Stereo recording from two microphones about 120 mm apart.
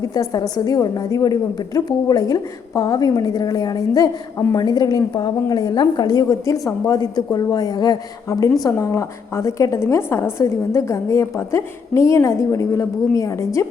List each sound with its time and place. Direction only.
0.1 s a woman's voice: 30° left (ahead or behind)